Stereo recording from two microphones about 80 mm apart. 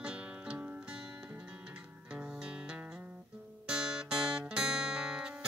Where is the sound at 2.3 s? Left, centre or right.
Centre.